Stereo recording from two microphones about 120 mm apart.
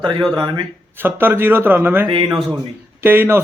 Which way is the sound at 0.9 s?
20° right (ahead or behind).